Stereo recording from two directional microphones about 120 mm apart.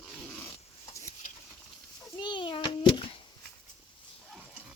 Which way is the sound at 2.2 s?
45° left (ahead or behind).